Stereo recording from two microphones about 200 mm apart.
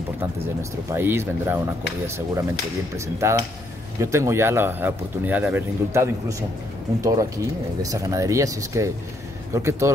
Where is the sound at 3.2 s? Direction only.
15° right (ahead or behind).